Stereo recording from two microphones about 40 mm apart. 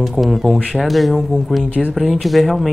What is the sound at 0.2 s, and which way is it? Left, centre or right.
Speech, centre.